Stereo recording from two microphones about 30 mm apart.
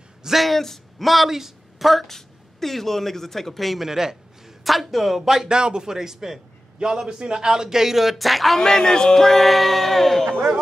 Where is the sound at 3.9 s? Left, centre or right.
Centre.